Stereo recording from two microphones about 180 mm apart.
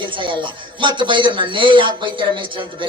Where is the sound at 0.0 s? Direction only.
25° right (ahead or behind).